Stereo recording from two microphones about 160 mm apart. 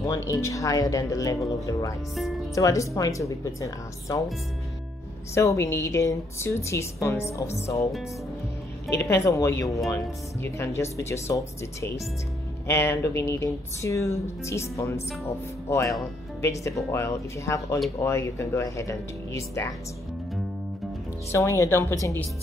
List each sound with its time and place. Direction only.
0.0 s speech: 20° left (ahead or behind)
5.3 s speech: 20° left (ahead or behind)
8.9 s speech: 15° left (ahead or behind)
21.3 s speech: 20° left (ahead or behind)